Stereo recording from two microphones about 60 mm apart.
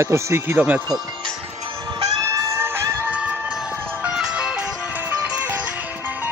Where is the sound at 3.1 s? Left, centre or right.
Centre.